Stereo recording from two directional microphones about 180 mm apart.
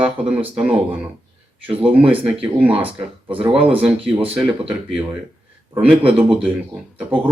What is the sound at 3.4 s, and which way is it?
Speech, 5° right (ahead or behind).